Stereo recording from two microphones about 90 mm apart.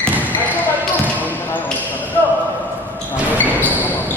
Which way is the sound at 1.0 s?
20° left (ahead or behind).